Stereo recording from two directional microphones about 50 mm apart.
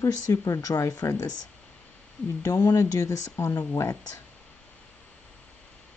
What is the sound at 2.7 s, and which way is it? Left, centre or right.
Speech, left.